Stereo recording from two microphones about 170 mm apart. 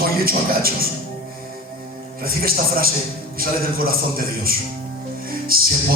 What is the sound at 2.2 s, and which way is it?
A man's voice, 60° right (ahead or behind).